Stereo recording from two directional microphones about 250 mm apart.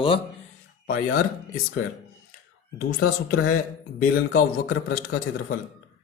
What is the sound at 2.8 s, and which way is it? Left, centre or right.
A man's voice, left.